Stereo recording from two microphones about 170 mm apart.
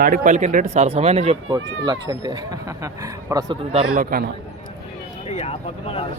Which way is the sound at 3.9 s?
60° right (ahead or behind).